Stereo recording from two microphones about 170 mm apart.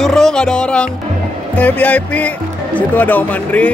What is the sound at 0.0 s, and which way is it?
Music, 5° left (ahead or behind).